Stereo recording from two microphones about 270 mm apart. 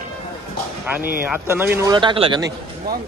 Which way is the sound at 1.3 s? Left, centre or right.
Centre.